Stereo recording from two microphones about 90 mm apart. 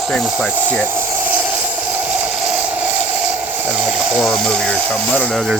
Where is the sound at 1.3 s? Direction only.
15° right (ahead or behind).